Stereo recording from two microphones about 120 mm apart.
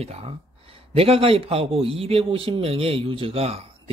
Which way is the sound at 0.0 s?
60° right (ahead or behind).